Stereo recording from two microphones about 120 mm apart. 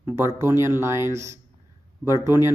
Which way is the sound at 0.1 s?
20° right (ahead or behind).